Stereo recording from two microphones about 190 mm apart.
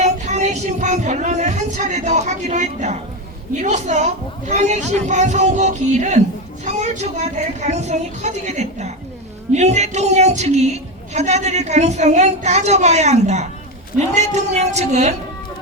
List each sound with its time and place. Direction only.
0.0 s a woman's voice: 35° right (ahead or behind)
6.7 s a sound: 35° right (ahead or behind)
7.6 s a woman's voice: 35° right (ahead or behind)